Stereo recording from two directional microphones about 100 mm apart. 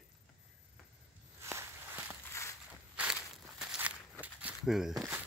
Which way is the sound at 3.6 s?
10° right (ahead or behind).